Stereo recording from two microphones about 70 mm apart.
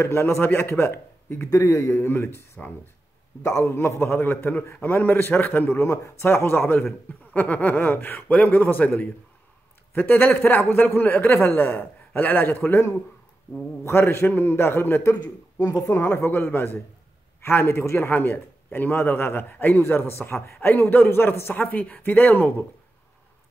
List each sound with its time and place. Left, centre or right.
0.0 s a man's voice: left
1.4 s a man's voice: left
5.9 s a man's voice: left
15.6 s speech: left
15.9 s a man's voice: left
17.9 s a man's voice: left